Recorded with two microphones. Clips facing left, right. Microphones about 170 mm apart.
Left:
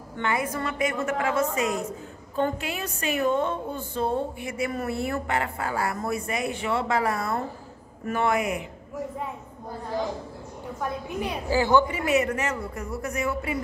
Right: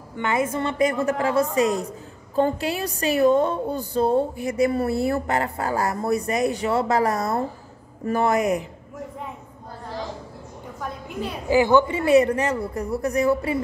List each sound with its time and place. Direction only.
0.2 s a woman's voice: 25° right (ahead or behind); by 8.6 s 40° right (ahead or behind)
11.4 s speech: 15° right (ahead or behind)
12.1 s a woman's voice: 35° right (ahead or behind)